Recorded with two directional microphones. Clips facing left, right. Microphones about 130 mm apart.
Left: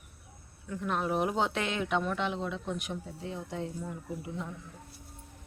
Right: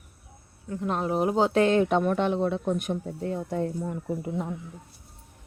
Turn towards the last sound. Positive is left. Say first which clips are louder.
# right 8 dB
turn(degrees=-50)  # may be behind; listen again after turning